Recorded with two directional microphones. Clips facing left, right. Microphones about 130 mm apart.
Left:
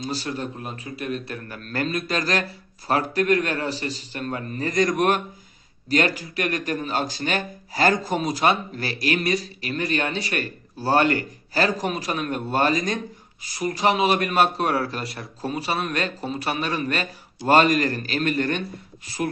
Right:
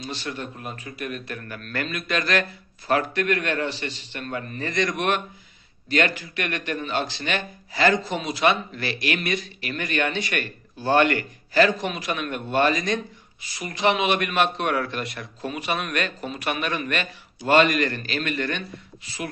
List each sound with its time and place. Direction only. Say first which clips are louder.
0.0 s a man's voice: left 4 dB; 35° left (ahead or behind)